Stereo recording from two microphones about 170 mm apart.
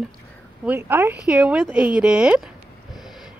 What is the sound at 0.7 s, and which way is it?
Speech, 10° right (ahead or behind).